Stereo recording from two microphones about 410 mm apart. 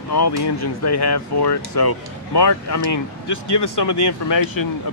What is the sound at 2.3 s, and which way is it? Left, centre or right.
Speech, left.